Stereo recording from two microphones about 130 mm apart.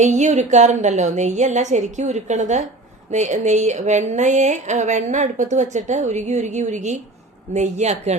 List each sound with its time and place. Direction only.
0.0 s speech: 65° right (ahead or behind)